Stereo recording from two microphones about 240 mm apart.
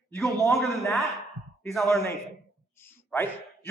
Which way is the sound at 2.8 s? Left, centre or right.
Centre.